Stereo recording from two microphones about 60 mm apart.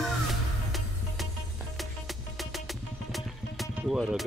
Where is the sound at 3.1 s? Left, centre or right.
Centre.